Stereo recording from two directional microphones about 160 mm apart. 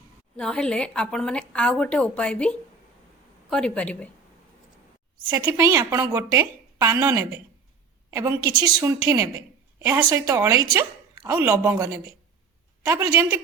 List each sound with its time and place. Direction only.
0.3 s a woman's voice: 5° left (ahead or behind)
5.3 s a woman's voice: 20° right (ahead or behind)